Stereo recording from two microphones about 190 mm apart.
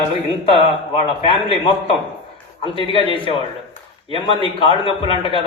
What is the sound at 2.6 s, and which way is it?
A man's voice, 30° left (ahead or behind).